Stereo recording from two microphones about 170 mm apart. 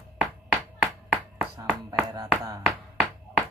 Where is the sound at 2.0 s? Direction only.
20° right (ahead or behind).